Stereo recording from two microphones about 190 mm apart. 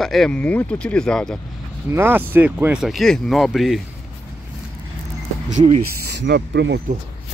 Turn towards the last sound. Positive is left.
turn(degrees=-65)  # may be behind; listen again after turning